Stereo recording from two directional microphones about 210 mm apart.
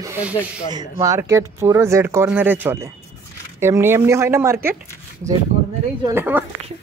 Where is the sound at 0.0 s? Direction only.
10° right (ahead or behind).